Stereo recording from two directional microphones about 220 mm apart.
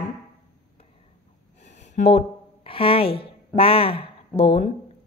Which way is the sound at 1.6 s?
30° left (ahead or behind).